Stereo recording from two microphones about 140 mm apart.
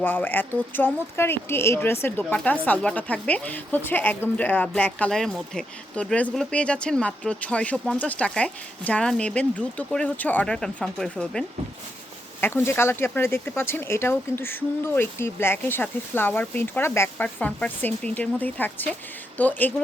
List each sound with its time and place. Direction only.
0.0 s a woman's voice: 15° left (ahead or behind)
12.4 s a woman's voice: 15° left (ahead or behind)